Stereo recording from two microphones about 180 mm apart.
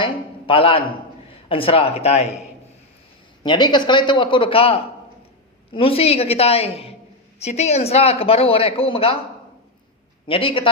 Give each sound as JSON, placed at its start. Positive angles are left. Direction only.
{"t": 0.0, "sound": "a man's voice", "side_deg": 30}
{"t": 3.4, "sound": "a man's voice", "side_deg": 25}
{"t": 10.2, "sound": "a man's voice", "side_deg": 30}